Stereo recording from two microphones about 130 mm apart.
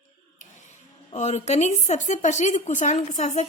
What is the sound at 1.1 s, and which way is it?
A woman's voice, 60° left (ahead or behind).